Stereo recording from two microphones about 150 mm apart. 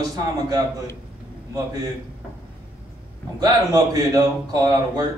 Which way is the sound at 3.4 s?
25° right (ahead or behind).